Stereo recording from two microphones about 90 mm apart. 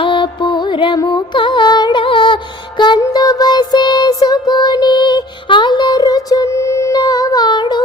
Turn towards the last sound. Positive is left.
turn(degrees=55)  # may be behind; listen again after turning